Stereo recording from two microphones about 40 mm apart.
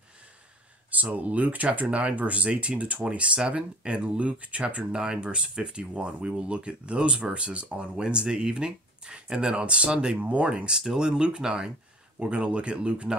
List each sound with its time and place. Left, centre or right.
1.1 s speech: right
4.9 s speech: right
10.1 s speech: right
10.9 s speech: centre